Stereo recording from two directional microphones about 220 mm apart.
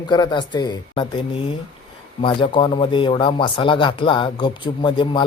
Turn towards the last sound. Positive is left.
turn(degrees=20)  # may be behind; listen again after turning